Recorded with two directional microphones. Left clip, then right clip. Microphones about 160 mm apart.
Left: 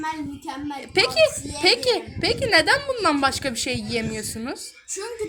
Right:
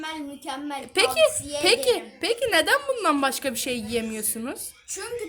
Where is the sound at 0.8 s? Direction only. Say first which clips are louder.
Left 2 dB; 20° right (ahead or behind).